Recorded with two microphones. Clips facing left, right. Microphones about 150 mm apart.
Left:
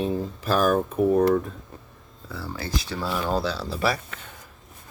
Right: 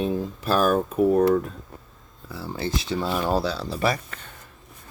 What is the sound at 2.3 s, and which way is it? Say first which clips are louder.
Speech: right 2 dB; 20° right (ahead or behind).